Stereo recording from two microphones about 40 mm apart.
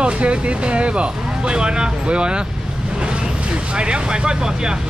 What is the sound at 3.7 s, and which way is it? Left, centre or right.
Speech, right.